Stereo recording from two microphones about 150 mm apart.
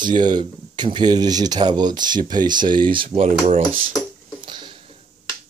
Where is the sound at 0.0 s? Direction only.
30° right (ahead or behind).